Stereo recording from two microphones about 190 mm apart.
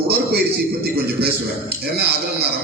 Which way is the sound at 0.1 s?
55° right (ahead or behind).